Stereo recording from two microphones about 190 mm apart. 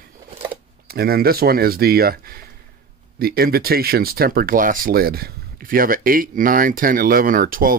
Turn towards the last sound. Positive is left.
turn(degrees=-45)  # may be behind; listen again after turning